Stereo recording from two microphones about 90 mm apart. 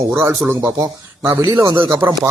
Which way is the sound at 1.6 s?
65° right (ahead or behind).